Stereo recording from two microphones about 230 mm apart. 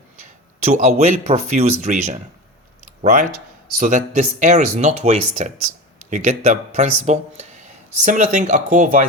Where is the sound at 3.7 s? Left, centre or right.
Right.